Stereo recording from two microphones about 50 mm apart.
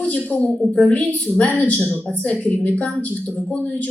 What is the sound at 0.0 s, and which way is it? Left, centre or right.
A woman's voice, left.